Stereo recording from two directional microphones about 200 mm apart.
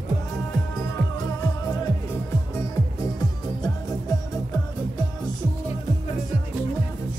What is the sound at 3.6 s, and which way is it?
Music, 20° left (ahead or behind).